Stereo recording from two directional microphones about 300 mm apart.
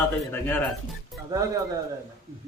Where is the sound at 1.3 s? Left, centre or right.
Centre.